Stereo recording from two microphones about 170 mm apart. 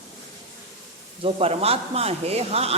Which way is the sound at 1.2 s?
35° right (ahead or behind).